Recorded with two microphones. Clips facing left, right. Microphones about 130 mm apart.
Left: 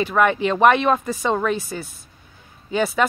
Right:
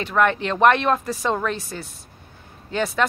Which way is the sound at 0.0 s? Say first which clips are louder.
Left 2 dB; 5° left (ahead or behind).